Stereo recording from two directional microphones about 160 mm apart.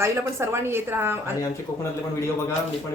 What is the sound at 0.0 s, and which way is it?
A woman's voice, 15° right (ahead or behind).